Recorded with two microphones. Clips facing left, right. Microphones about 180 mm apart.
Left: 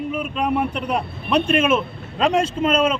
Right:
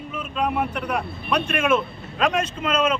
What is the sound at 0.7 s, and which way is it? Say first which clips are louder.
A man's voice: left 2 dB; 30° left (ahead or behind).